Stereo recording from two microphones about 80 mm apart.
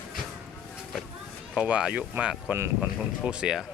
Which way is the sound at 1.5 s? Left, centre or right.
Centre.